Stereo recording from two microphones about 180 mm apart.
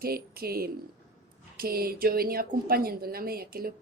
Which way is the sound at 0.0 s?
55° right (ahead or behind).